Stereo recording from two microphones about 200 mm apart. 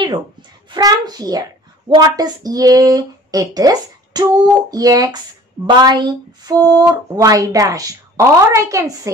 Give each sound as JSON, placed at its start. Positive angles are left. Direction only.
{"t": 0.0, "sound": "a child's voice", "side_deg": -20}